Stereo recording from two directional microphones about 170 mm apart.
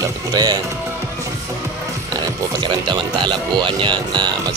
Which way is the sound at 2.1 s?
25° right (ahead or behind).